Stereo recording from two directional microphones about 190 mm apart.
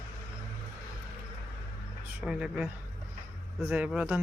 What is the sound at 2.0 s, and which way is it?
Speech, 5° right (ahead or behind).